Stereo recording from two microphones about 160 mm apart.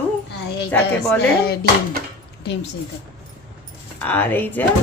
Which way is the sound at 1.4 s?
75° left (ahead or behind).